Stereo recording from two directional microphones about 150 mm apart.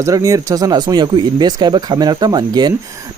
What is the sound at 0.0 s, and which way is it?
Speech, 20° right (ahead or behind).